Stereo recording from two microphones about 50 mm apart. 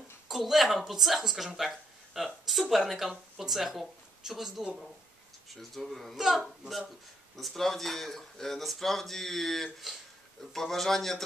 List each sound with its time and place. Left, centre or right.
0.3 s speech: centre